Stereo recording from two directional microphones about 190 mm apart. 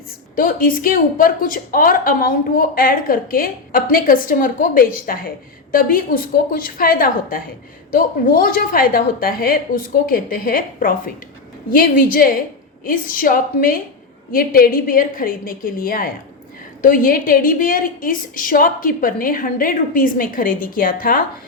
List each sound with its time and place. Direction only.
0.3 s a woman's voice: 50° left (ahead or behind)